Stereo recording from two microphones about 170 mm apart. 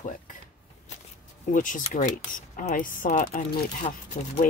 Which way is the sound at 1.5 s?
50° left (ahead or behind).